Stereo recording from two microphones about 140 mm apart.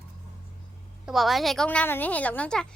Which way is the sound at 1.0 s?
Centre (ahead or behind).